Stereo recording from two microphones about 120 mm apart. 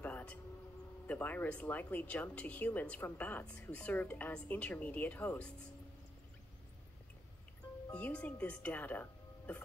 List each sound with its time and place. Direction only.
0.0 s a sound: 10° left (ahead or behind)
1.0 s speech: 15° left (ahead or behind)
7.9 s speech: 10° left (ahead or behind)